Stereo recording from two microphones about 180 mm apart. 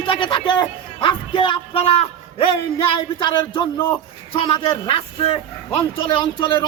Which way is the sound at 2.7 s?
30° left (ahead or behind).